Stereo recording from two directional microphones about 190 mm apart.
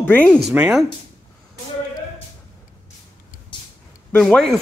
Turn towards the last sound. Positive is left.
turn(degrees=5)  # may be behind; listen again after turning